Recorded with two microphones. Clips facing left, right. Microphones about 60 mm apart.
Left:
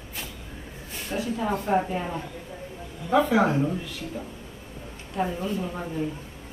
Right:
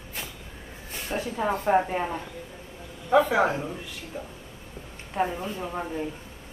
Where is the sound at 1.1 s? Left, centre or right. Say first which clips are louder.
Even; right.